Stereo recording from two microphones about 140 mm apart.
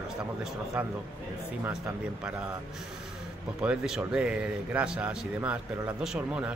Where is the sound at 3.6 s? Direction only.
5° right (ahead or behind).